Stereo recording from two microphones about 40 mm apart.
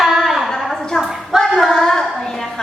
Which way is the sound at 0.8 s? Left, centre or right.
Centre.